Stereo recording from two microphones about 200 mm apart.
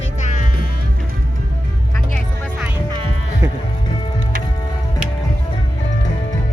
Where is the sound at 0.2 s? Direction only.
40° left (ahead or behind).